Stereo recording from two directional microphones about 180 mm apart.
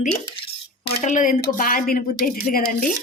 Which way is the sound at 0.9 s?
45° left (ahead or behind).